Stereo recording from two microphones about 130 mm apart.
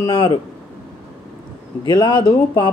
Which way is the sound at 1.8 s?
40° left (ahead or behind).